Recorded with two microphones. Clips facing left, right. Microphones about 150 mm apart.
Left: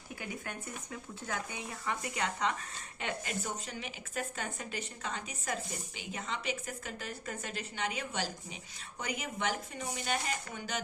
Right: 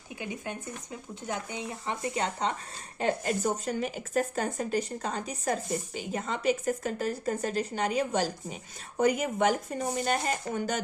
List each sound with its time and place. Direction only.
0.2 s speech: 20° right (ahead or behind); by 10.8 s 45° right (ahead or behind)